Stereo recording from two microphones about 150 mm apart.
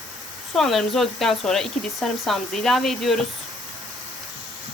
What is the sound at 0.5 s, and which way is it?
Speech, centre (ahead or behind).